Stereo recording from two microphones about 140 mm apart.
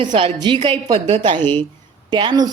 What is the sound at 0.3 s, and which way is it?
A woman's voice, 35° right (ahead or behind).